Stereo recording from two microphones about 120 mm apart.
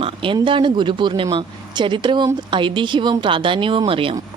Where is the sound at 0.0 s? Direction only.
45° right (ahead or behind).